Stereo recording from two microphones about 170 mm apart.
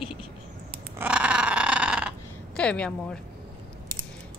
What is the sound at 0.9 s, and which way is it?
Dog, 10° right (ahead or behind).